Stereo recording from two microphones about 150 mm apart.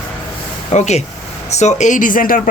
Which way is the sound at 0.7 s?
50° left (ahead or behind).